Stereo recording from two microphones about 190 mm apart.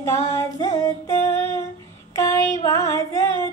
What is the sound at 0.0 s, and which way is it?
Female singing, 15° left (ahead or behind).